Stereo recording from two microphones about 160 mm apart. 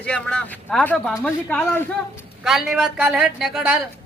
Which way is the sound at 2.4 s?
Centre (ahead or behind).